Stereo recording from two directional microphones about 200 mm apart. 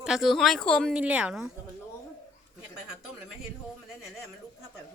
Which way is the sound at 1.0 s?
5° right (ahead or behind).